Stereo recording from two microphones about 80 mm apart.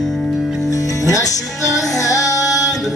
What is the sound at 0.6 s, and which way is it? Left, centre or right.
Music, left.